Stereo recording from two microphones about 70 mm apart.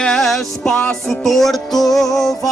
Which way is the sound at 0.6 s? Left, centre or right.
Centre.